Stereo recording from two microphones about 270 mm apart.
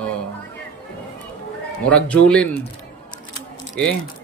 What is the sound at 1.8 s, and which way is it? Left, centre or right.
Speech, centre.